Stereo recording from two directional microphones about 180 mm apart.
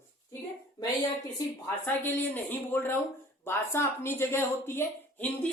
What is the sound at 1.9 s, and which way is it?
Speech, 10° left (ahead or behind).